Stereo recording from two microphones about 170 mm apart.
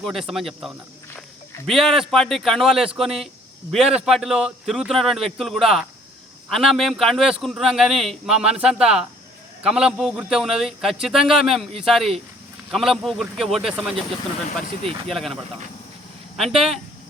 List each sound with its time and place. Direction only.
0.0 s a man's voice: centre (ahead or behind)
15.1 s a man's voice: centre (ahead or behind)